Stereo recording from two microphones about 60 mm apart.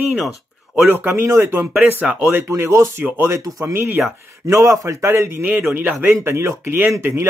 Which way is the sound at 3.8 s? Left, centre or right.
Right.